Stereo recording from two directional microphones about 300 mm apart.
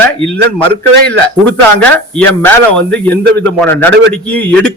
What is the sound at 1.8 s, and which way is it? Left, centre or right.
A man's voice, centre.